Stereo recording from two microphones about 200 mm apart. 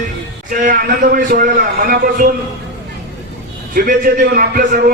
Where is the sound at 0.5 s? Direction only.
45° right (ahead or behind).